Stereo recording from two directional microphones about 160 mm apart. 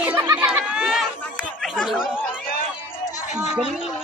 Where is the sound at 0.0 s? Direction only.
10° right (ahead or behind).